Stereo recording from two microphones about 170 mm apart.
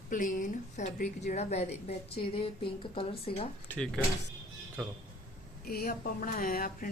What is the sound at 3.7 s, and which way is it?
Speech, 5° left (ahead or behind).